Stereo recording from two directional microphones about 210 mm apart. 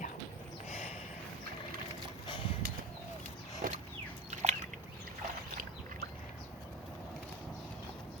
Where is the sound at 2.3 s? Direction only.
25° left (ahead or behind).